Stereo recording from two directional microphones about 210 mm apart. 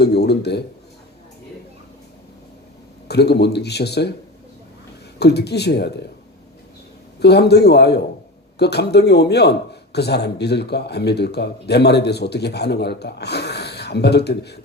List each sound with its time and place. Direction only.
0.0 s speech: 50° left (ahead or behind)
3.1 s a man's voice: 50° left (ahead or behind)
5.2 s a man's voice: 50° left (ahead or behind)
7.2 s a man's voice: 50° left (ahead or behind)